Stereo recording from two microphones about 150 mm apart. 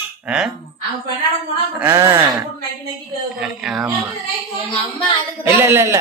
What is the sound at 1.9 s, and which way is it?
Speech, 20° right (ahead or behind).